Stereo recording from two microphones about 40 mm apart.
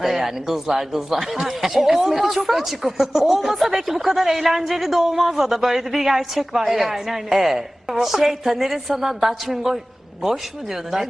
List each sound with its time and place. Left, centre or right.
0.0 s speech: centre